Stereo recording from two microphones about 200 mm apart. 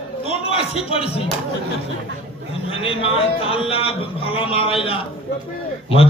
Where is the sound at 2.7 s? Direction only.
25° left (ahead or behind).